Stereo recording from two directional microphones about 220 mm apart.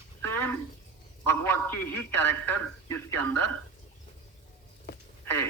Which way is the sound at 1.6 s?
10° left (ahead or behind).